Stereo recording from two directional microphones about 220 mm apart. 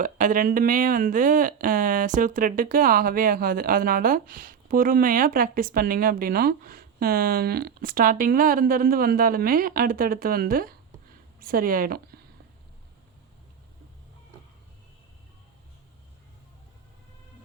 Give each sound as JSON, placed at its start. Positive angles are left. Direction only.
{"t": 0.0, "sound": "speech", "side_deg": -35}